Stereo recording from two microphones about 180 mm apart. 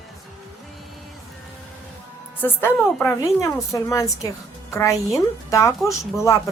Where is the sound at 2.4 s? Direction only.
10° left (ahead or behind).